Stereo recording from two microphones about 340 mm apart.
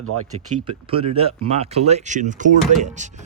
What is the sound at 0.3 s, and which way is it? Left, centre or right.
Speech, centre.